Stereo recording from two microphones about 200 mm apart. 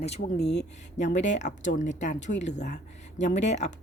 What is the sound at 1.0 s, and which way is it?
Speech, 35° left (ahead or behind).